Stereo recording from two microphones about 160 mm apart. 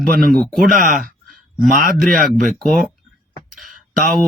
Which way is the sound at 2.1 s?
5° left (ahead or behind).